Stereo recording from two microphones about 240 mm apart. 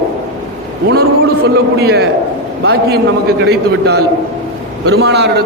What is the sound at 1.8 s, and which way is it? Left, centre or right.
A man's voice, right.